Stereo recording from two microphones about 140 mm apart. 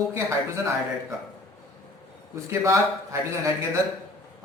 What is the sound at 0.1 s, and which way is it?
Speech, 20° right (ahead or behind).